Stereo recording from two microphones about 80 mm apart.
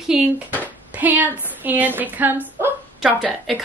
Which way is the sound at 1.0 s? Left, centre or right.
Right.